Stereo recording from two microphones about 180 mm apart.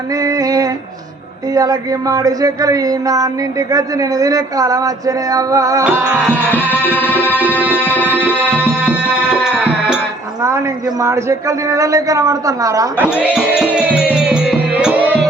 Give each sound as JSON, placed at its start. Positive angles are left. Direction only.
{"t": 0.1, "sound": "a sound", "side_deg": -20}
{"t": 6.3, "sound": "tabla", "side_deg": 10}
{"t": 7.6, "sound": "a man's voice", "side_deg": -10}
{"t": 8.2, "sound": "music", "side_deg": -10}
{"t": 10.4, "sound": "a man's voice", "side_deg": -15}
{"t": 13.1, "sound": "speech", "side_deg": -5}
{"t": 13.6, "sound": "music", "side_deg": -5}